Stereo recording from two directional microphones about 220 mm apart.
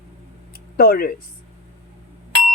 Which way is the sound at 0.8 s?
40° left (ahead or behind).